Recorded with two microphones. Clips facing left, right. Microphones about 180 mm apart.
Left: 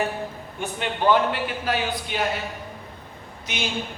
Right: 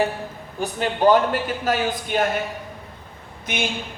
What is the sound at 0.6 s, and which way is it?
A man's voice, 40° right (ahead or behind).